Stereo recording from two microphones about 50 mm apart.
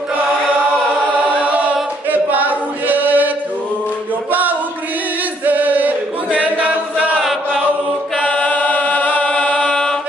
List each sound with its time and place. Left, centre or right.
2.0 s choir: right
4.3 s choir: right
5.4 s chant: right
8.2 s chant: left
9.3 s chant: centre